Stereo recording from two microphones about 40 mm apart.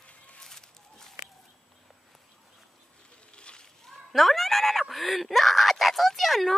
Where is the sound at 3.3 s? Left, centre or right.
Left.